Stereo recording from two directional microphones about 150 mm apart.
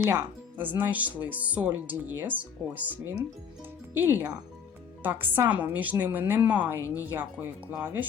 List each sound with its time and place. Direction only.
0.0 s speech: 15° right (ahead or behind)